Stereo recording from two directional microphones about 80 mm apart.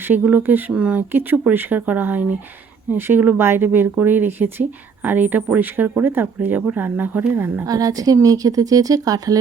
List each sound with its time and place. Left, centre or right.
0.1 s speech: right
7.7 s a woman's voice: right